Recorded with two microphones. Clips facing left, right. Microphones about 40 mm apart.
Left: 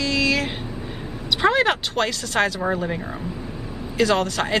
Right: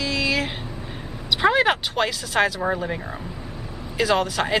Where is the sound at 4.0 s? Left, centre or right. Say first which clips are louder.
Left 1 dB; centre.